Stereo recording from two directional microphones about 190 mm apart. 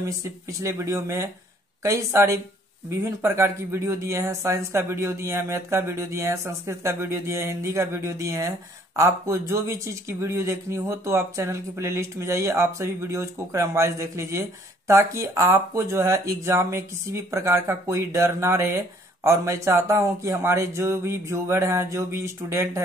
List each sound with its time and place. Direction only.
0.5 s speech: 15° right (ahead or behind)